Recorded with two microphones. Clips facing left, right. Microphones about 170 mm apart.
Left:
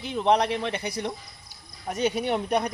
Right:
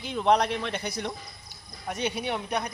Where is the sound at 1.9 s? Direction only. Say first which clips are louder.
Left 5 dB; 45° left (ahead or behind).